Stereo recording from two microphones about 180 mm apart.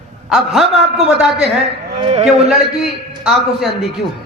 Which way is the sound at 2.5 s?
Centre (ahead or behind).